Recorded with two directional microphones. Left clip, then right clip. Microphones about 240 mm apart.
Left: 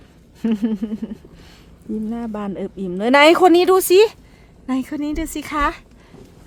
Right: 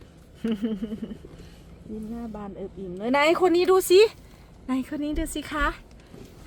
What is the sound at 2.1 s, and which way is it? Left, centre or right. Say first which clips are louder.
A woman's voice: left 9 dB; left.